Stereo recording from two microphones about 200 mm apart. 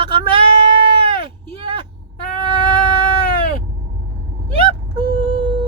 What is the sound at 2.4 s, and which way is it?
Cat, 25° right (ahead or behind).